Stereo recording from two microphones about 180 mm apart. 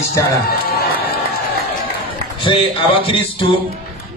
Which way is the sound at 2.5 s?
30° left (ahead or behind).